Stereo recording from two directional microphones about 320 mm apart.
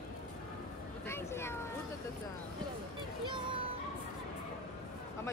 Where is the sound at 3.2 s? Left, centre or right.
Centre.